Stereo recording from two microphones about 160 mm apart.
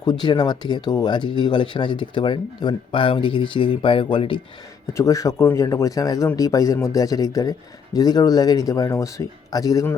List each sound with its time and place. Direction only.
0.0 s speech: 25° left (ahead or behind)
4.9 s speech: 20° left (ahead or behind)